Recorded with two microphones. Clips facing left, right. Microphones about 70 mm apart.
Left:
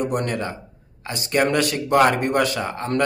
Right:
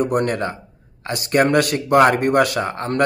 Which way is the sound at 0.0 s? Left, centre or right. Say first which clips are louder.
Right 4 dB; right.